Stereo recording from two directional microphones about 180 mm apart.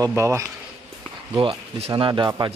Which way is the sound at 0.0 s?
15° right (ahead or behind).